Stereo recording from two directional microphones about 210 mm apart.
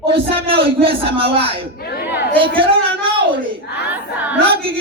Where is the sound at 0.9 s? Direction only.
25° right (ahead or behind).